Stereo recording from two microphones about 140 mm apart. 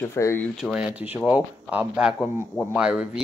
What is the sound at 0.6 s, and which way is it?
Speech, 5° right (ahead or behind).